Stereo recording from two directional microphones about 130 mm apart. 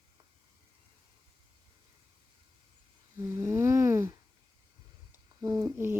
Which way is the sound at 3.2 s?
20° right (ahead or behind).